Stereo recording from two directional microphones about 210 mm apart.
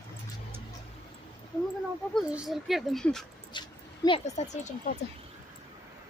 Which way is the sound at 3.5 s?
20° left (ahead or behind).